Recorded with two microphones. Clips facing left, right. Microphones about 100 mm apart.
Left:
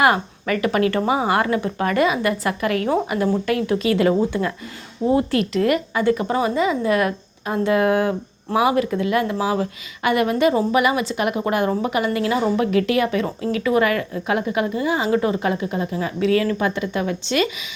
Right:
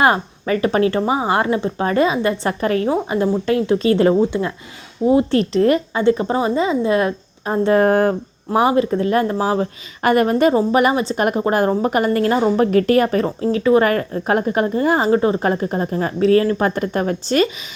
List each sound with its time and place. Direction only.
0.0 s speech: 30° right (ahead or behind)
4.1 s speech: 20° right (ahead or behind)
5.3 s speech: 35° right (ahead or behind)
8.5 s speech: 30° right (ahead or behind)